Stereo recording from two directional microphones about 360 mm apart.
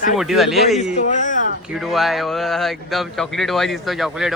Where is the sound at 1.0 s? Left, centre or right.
Centre.